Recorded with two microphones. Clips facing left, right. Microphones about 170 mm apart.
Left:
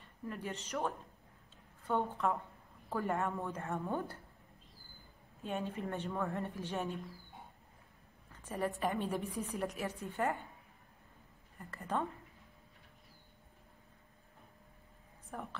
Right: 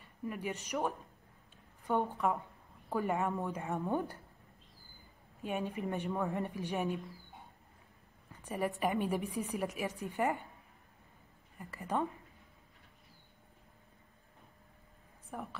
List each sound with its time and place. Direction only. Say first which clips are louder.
0.0 s a woman's voice: right 3 dB; 10° right (ahead or behind)
5.4 s a woman's voice: right 2 dB; 15° right (ahead or behind)
8.3 s a woman's voice: right 1 dB; 10° right (ahead or behind)
11.5 s a woman's voice: right 2 dB; 10° right (ahead or behind)
15.3 s a woman's voice: right 1 dB; 5° right (ahead or behind)